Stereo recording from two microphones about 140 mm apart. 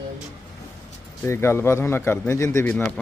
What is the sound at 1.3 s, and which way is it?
Speech, 20° left (ahead or behind).